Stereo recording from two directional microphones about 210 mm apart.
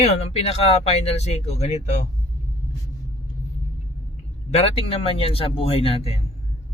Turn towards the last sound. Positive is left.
turn(degrees=25)  # may be behind; listen again after turning